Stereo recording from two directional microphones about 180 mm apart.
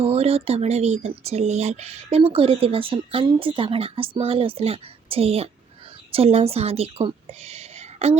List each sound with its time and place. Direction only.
0.0 s a woman's voice: 35° right (ahead or behind)